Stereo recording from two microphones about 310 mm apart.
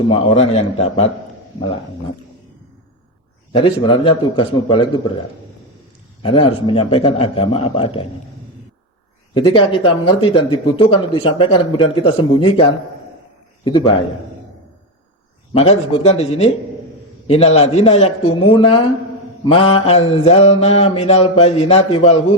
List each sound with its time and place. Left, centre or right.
0.1 s mantra: centre
3.5 s speech: centre
6.2 s speech: centre
9.3 s speech: centre
13.7 s speech: centre
15.5 s mantra: centre